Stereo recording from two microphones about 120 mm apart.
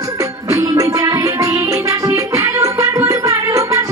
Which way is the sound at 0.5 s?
25° right (ahead or behind).